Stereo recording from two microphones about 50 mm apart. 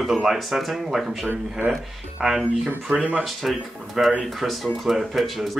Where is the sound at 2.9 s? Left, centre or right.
Right.